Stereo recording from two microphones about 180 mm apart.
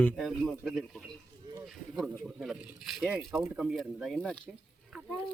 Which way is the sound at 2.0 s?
Centre (ahead or behind).